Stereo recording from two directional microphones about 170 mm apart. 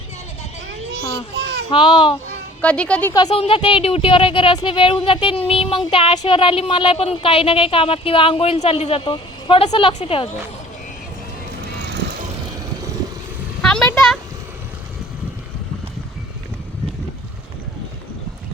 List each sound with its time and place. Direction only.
1.7 s speech: 30° left (ahead or behind)
2.6 s speech: 5° left (ahead or behind)
3.2 s speech: 35° left (ahead or behind)
11.9 s vehicle: 85° right
13.6 s a sound: 5° left (ahead or behind)